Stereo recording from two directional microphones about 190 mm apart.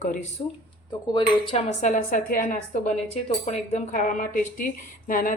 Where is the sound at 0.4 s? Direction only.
35° left (ahead or behind).